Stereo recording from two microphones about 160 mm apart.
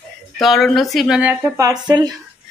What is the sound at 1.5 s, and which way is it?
Speech, 20° right (ahead or behind).